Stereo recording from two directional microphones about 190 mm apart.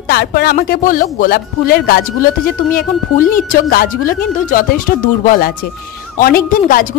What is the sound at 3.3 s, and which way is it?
Speech, 50° left (ahead or behind).